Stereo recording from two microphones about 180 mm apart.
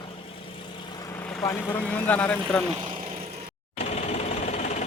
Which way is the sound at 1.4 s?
10° left (ahead or behind).